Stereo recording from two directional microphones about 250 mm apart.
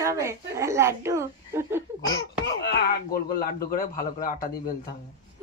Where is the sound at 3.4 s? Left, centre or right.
Left.